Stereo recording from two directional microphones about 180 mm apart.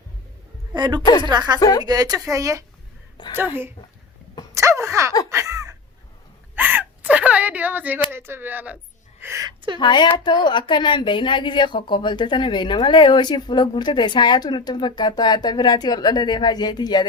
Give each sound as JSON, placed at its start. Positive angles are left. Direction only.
{"t": 0.7, "sound": "speech", "side_deg": -25}
{"t": 1.5, "sound": "speech", "side_deg": 20}
{"t": 1.8, "sound": "speech", "side_deg": -20}
{"t": 4.5, "sound": "a sound", "side_deg": -15}
{"t": 6.6, "sound": "gasp", "side_deg": -10}
{"t": 8.1, "sound": "a woman's voice", "side_deg": -10}
{"t": 9.7, "sound": "speech", "side_deg": 25}